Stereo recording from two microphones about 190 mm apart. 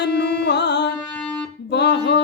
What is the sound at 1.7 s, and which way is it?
Music, 65° left (ahead or behind).